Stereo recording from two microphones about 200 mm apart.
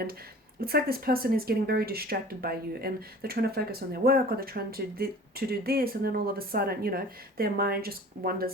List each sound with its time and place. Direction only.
0.6 s speech: 50° right (ahead or behind)